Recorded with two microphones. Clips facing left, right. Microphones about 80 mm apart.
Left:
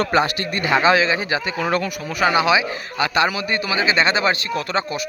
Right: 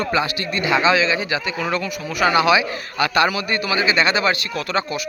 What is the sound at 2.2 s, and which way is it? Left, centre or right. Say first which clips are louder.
A man's voice: right 1 dB; left.